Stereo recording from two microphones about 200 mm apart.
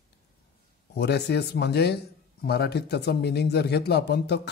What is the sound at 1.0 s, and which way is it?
Speech, 55° left (ahead or behind).